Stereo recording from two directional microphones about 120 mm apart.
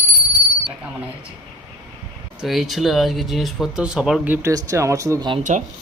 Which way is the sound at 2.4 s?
Centre (ahead or behind).